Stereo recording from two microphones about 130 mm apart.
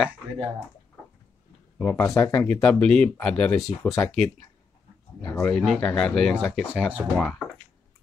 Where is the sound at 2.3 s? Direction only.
10° left (ahead or behind).